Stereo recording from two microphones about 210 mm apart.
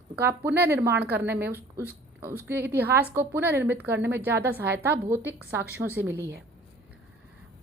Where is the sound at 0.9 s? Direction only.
50° right (ahead or behind).